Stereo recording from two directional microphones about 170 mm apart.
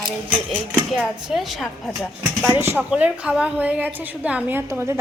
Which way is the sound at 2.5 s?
15° right (ahead or behind).